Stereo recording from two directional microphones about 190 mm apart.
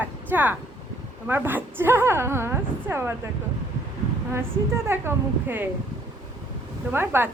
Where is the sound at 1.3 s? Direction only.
10° right (ahead or behind).